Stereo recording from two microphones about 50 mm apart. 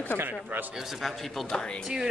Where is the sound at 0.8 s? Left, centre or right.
Centre.